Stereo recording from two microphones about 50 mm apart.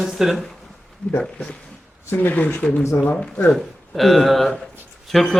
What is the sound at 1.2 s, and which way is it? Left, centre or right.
Speech, centre.